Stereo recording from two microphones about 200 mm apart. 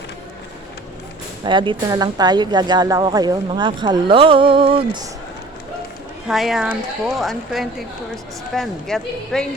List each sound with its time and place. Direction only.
1.5 s speech: 25° right (ahead or behind)
6.2 s speech: centre (ahead or behind)